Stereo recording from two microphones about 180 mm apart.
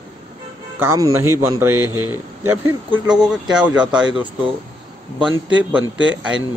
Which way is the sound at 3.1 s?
5° right (ahead or behind).